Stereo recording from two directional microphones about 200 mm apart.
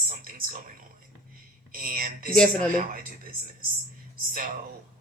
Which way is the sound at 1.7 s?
45° right (ahead or behind).